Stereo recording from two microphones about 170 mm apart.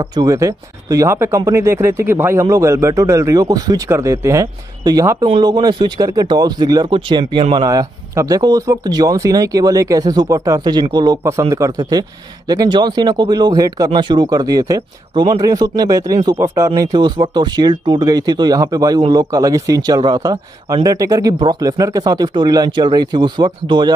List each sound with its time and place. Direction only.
0.0 s speech: 20° right (ahead or behind)